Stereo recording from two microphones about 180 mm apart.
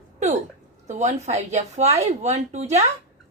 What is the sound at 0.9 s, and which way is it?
A woman's voice, 40° right (ahead or behind).